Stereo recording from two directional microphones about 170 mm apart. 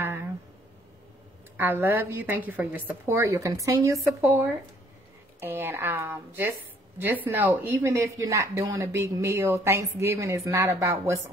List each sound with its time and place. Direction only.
1.6 s a woman's voice: 10° right (ahead or behind)